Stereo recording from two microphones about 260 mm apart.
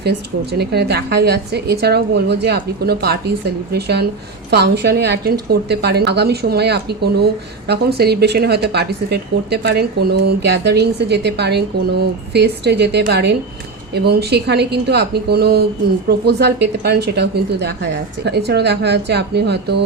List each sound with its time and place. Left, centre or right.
0.0 s speech: right